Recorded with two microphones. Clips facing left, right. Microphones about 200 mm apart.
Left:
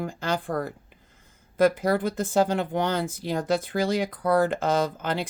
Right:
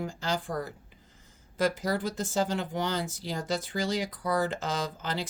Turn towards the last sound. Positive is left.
turn(degrees=55)  # may be behind; listen again after turning